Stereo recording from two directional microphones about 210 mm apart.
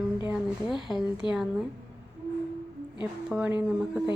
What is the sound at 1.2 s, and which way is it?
Speech, 25° left (ahead or behind).